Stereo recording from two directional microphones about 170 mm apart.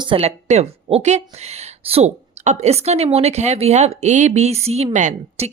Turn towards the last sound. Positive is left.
turn(degrees=-45)  # may be behind; listen again after turning